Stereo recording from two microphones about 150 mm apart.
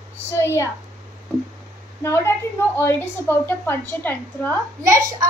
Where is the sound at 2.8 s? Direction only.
15° left (ahead or behind).